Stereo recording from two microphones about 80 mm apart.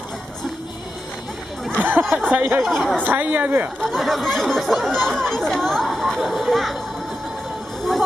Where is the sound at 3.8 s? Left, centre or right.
Centre.